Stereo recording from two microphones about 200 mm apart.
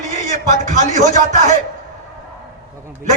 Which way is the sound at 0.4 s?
40° right (ahead or behind).